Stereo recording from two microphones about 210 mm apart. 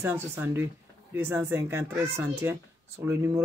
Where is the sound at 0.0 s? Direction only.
10° right (ahead or behind).